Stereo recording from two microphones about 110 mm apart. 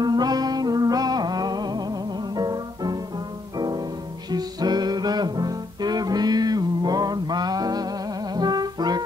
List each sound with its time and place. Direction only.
0.0 s music: 40° right (ahead or behind)